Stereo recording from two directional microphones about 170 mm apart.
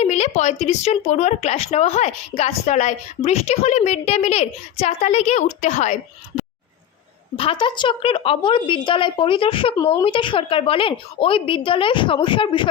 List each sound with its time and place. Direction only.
0.0 s a sound: 40° left (ahead or behind)
0.6 s a woman's voice: 40° left (ahead or behind)
7.3 s a woman's voice: 30° left (ahead or behind)